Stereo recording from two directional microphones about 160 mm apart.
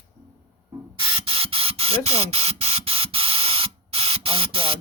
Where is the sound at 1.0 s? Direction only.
35° right (ahead or behind).